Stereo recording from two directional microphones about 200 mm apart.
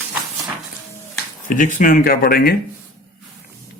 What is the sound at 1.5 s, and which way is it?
Speech, 40° left (ahead or behind).